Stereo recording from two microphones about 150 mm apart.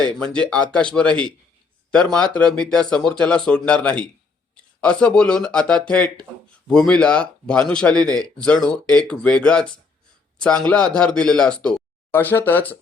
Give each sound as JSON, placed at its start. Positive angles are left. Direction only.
{"t": 0.2, "sound": "speech", "side_deg": 5}